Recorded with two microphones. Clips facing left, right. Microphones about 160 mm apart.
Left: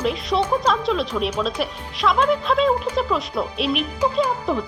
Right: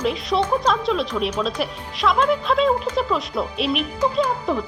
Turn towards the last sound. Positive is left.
turn(degrees=5)  # may be behind; listen again after turning